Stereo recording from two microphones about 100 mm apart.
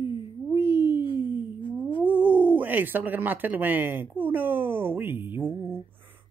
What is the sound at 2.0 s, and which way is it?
Speech, 15° right (ahead or behind).